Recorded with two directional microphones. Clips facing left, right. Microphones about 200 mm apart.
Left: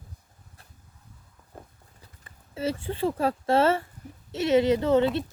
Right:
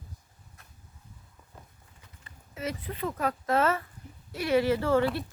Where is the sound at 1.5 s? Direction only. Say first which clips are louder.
Left 7 dB; 50° left (ahead or behind).